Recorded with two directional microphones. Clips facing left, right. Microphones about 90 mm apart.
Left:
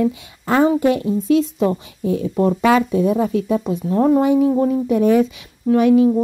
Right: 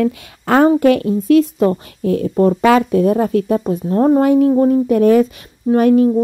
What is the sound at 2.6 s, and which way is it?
Speech, 55° right (ahead or behind).